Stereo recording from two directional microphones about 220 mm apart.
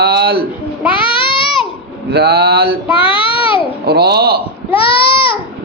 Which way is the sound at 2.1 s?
45° right (ahead or behind).